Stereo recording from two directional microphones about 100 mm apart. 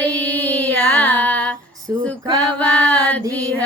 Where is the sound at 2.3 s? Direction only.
15° left (ahead or behind).